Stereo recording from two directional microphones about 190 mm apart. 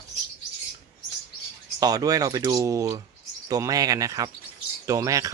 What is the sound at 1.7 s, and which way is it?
Speech, 20° right (ahead or behind).